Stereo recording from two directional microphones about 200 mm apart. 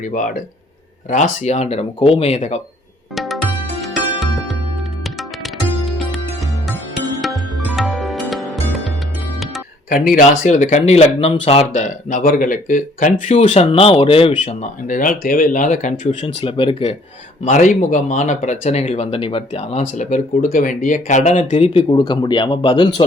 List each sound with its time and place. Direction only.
0.1 s speech: 40° left (ahead or behind)
3.2 s music: centre (ahead or behind)
7.8 s music: centre (ahead or behind)
9.9 s speech: 45° left (ahead or behind); by 16.9 s 25° left (ahead or behind)
17.4 s speech: 40° left (ahead or behind)